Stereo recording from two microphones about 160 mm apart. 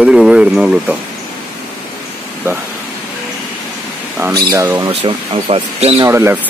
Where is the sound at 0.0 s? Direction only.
5° right (ahead or behind).